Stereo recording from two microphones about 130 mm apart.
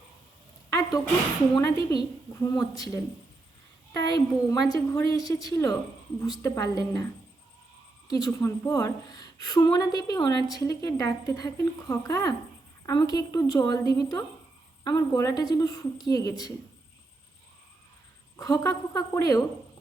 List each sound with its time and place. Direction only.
0.7 s a sound: 25° left (ahead or behind)
2.3 s a woman's voice: 25° left (ahead or behind)
18.3 s a woman's voice: 25° left (ahead or behind)